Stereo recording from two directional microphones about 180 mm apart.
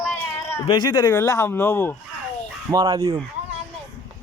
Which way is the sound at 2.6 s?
20° right (ahead or behind).